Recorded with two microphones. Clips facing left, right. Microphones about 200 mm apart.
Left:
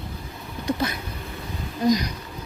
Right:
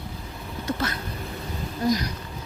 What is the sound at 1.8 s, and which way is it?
Speech, 20° left (ahead or behind).